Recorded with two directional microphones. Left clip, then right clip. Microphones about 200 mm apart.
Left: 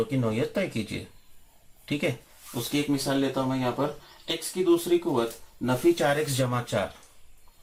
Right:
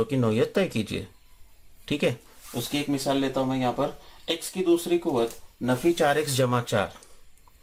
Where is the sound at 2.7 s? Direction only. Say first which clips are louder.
Left 1 dB; 40° right (ahead or behind).